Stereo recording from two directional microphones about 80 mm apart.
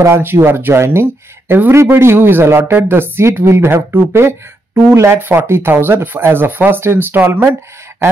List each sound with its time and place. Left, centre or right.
0.0 s speech: right